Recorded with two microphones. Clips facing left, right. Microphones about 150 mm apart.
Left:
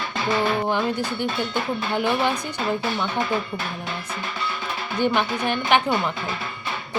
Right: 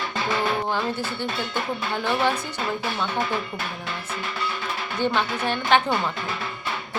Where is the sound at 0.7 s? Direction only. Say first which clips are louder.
Left 3 dB; 15° left (ahead or behind).